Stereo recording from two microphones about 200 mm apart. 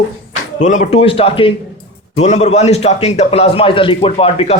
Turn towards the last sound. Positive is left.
turn(degrees=30)  # may be behind; listen again after turning